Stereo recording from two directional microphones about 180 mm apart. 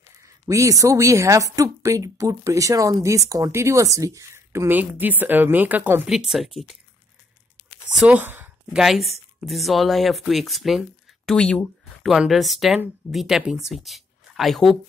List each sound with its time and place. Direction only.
0.5 s a woman's voice: 20° right (ahead or behind); by 6.8 s centre (ahead or behind)
7.9 s a woman's voice: 5° right (ahead or behind)